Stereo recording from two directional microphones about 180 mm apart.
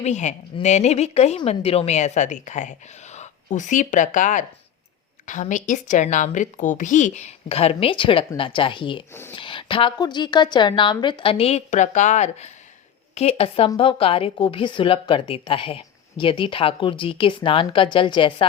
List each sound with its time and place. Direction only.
0.0 s a woman's voice: 40° left (ahead or behind)